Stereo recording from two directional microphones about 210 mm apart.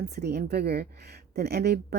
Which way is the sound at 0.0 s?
50° right (ahead or behind).